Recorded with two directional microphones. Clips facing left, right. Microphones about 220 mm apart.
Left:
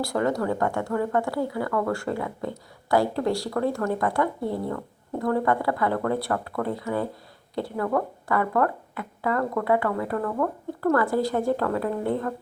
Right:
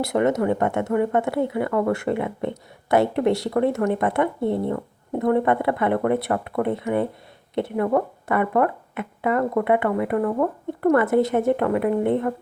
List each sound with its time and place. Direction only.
0.0 s speech: 20° right (ahead or behind)